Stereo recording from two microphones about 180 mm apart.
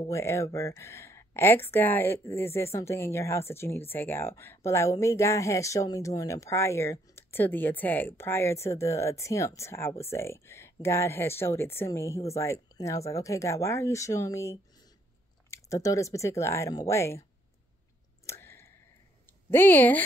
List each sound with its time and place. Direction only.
0.0 s speech: 15° left (ahead or behind)
18.2 s a sound: 15° left (ahead or behind)
19.5 s speech: 10° left (ahead or behind)